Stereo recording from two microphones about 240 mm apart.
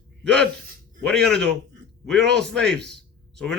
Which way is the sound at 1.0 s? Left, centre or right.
Centre.